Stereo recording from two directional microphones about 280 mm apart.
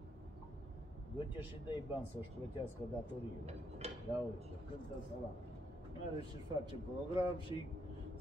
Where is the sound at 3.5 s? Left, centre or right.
Right.